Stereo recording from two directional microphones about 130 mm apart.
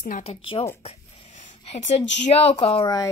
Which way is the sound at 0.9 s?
55° left (ahead or behind).